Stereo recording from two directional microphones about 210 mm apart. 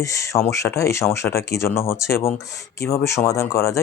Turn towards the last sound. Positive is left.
turn(degrees=15)  # may be behind; listen again after turning